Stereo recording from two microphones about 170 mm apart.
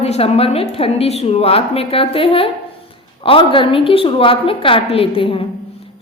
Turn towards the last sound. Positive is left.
turn(degrees=35)  # may be behind; listen again after turning